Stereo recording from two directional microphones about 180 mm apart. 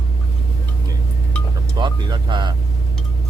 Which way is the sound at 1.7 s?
25° right (ahead or behind).